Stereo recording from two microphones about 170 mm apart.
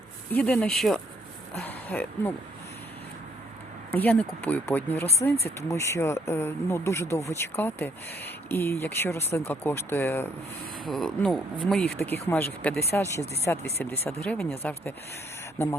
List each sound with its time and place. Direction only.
0.4 s speech: 5° left (ahead or behind)
3.9 s speech: 10° left (ahead or behind)
10.8 s speech: centre (ahead or behind)